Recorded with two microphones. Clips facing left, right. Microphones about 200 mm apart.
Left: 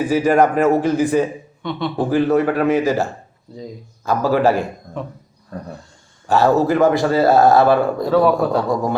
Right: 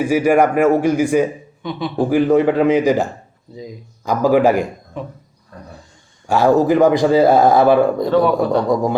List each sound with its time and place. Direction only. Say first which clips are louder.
0.0 s a man's voice: right 1 dB; 10° right (ahead or behind)
6.2 s a man's voice: right 2 dB; 10° right (ahead or behind)
8.0 s speech: even; centre (ahead or behind)